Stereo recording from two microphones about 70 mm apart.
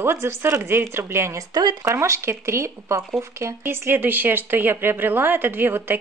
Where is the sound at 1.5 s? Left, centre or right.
Right.